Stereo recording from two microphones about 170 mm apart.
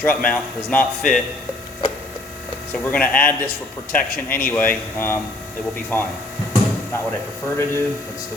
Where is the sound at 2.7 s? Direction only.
5° left (ahead or behind).